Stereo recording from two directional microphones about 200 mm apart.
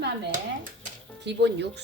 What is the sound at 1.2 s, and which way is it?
Speech, 60° right (ahead or behind).